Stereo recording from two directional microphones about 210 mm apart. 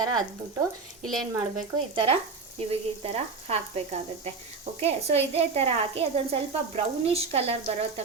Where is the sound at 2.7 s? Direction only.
30° right (ahead or behind).